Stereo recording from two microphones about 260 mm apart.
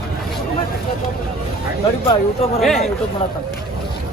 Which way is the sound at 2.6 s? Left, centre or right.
Centre.